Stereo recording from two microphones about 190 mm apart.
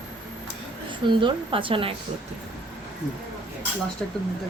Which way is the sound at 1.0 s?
25° right (ahead or behind).